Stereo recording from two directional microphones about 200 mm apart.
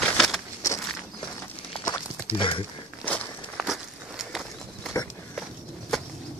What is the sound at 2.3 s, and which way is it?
Speech, 25° left (ahead or behind).